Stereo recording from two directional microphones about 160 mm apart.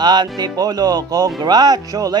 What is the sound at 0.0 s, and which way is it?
Speech, 25° right (ahead or behind).